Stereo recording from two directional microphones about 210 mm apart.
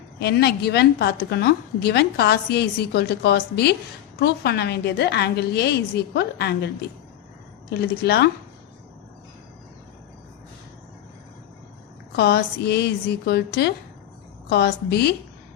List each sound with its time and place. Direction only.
0.2 s a woman's voice: 50° left (ahead or behind)
7.7 s a woman's voice: 50° left (ahead or behind)
12.1 s a woman's voice: 50° left (ahead or behind)